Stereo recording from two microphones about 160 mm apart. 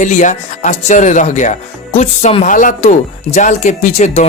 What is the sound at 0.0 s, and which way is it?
Speech, 50° left (ahead or behind).